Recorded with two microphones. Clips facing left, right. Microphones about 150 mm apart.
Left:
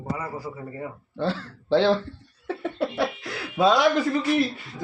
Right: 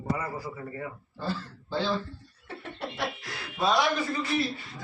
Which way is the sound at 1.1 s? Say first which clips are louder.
Left 7 dB; 75° left (ahead or behind).